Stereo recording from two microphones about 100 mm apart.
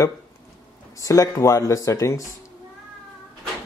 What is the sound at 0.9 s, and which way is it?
Speech, 35° left (ahead or behind).